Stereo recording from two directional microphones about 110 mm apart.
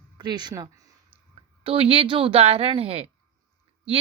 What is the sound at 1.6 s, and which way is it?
Speech, 55° right (ahead or behind).